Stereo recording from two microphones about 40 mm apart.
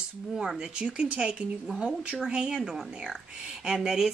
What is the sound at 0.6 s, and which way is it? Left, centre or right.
A woman's voice, right.